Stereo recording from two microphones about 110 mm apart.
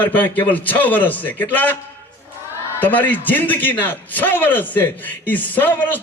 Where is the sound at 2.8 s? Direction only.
15° left (ahead or behind).